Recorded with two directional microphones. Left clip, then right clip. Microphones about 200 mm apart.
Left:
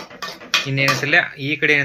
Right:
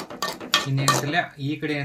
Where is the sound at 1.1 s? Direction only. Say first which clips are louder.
Left 8 dB; 35° left (ahead or behind).